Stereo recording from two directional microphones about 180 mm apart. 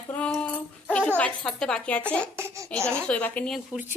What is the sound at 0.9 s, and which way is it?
A woman's voice, 10° left (ahead or behind).